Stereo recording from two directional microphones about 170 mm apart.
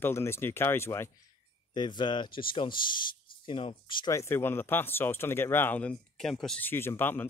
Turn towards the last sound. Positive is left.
turn(degrees=10)  # may be behind; listen again after turning